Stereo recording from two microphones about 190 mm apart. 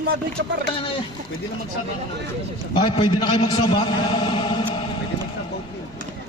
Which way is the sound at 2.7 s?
25° left (ahead or behind).